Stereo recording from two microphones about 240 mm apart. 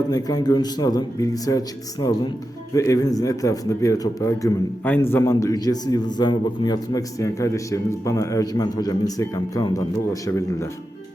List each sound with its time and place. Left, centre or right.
0.1 s a man's voice: centre